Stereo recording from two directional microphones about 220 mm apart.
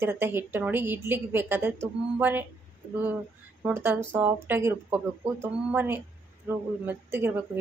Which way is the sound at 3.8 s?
10° right (ahead or behind).